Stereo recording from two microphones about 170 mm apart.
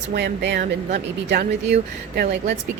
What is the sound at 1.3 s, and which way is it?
Speech, 80° right.